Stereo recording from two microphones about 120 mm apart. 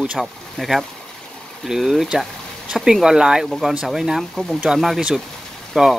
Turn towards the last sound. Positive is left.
turn(degrees=0)  # may be behind; listen again after turning